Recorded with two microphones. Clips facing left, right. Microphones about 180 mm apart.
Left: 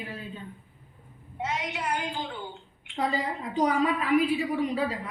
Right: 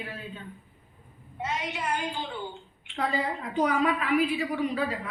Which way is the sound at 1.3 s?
15° left (ahead or behind).